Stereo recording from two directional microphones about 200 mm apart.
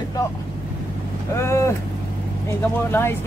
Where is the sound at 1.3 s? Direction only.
15° left (ahead or behind).